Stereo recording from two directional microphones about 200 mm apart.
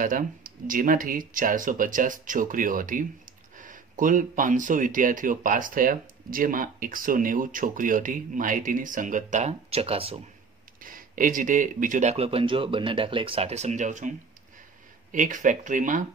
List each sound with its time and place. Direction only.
0.0 s speech: 40° right (ahead or behind)
10.8 s speech: 45° right (ahead or behind)